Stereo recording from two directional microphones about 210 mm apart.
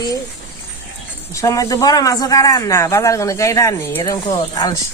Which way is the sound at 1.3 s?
15° left (ahead or behind).